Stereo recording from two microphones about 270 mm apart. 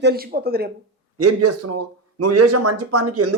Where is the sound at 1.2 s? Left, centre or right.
Right.